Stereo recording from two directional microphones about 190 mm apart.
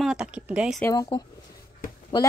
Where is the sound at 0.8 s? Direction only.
15° left (ahead or behind).